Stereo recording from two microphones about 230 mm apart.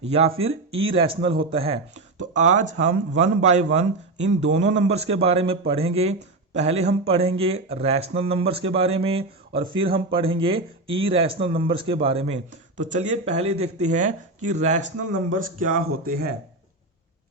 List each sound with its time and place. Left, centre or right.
0.0 s speech: right